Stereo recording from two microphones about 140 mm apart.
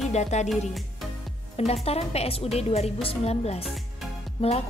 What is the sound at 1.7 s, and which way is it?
A woman's voice, 45° left (ahead or behind).